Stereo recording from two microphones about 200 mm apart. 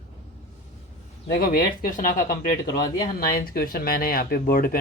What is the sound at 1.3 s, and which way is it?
Speech, 50° left (ahead or behind).